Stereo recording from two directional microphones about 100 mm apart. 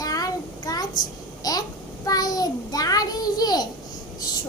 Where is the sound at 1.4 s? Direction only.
40° left (ahead or behind).